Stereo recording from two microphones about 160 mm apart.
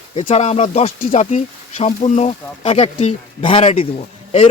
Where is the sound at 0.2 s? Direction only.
45° left (ahead or behind).